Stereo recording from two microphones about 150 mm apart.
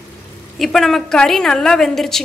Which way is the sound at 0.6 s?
Centre (ahead or behind).